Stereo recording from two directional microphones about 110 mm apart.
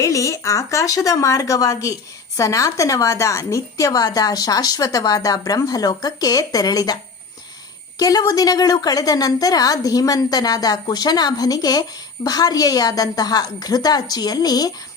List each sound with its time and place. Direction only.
0.0 s a woman's voice: 30° left (ahead or behind)